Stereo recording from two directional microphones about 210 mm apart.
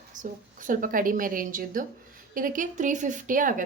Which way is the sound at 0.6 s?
40° right (ahead or behind).